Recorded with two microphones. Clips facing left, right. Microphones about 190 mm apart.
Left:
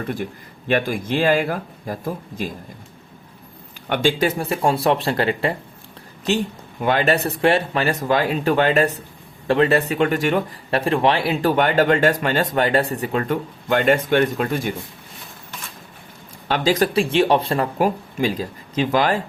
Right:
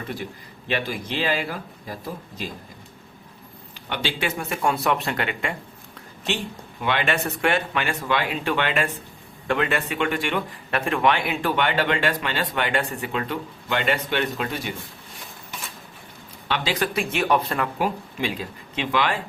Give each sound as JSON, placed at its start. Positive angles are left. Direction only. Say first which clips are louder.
{"t": 0.7, "sound": "speech", "louder": "left 7 dB", "side_deg": 50}
{"t": 3.8, "sound": "a man's voice", "louder": "left 8 dB", "side_deg": 50}
{"t": 6.8, "sound": "a man's voice", "louder": "left 6 dB", "side_deg": 40}
{"t": 16.5, "sound": "a man's voice", "louder": "left 7 dB", "side_deg": 40}